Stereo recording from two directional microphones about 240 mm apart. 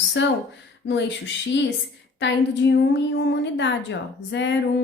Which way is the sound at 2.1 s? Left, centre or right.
Left.